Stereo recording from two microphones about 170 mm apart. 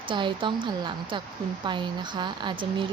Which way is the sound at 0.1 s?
30° right (ahead or behind).